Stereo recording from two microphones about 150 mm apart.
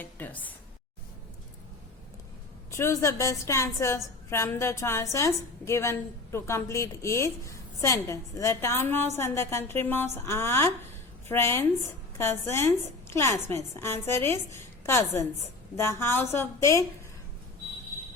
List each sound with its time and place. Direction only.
0.0 s a woman's voice: 10° left (ahead or behind)
2.6 s a woman's voice: 20° left (ahead or behind)